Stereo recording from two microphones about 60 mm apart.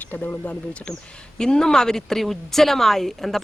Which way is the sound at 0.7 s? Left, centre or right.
Centre.